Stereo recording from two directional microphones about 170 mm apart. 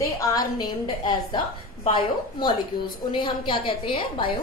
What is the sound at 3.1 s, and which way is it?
A woman's voice, 25° left (ahead or behind).